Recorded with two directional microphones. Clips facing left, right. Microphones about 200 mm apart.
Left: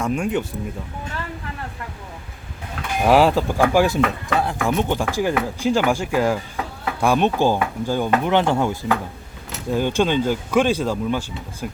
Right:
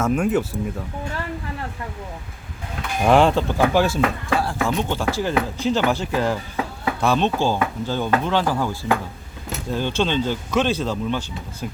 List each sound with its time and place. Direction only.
0.0 s speech: 5° right (ahead or behind)
3.0 s speech: 5° left (ahead or behind)